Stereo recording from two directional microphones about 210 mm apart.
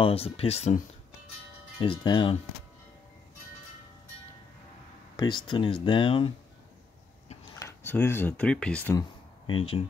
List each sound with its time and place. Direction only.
0.0 s speech: 25° left (ahead or behind)
5.1 s speech: 20° left (ahead or behind)
7.5 s speech: 10° left (ahead or behind)
9.5 s speech: 25° left (ahead or behind)